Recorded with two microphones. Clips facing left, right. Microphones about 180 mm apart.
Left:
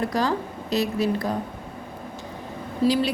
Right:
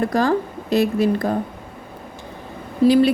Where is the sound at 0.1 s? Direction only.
50° right (ahead or behind).